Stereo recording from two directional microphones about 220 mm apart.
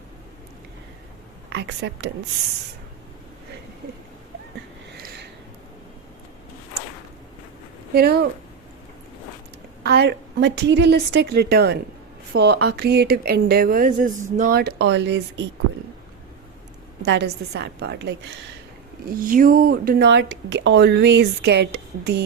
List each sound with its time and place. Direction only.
1.5 s speech: 50° right (ahead or behind)
5.0 s a sound: 50° right (ahead or behind)
7.9 s speech: 45° right (ahead or behind)
9.8 s speech: 50° right (ahead or behind)
17.0 s speech: 50° right (ahead or behind)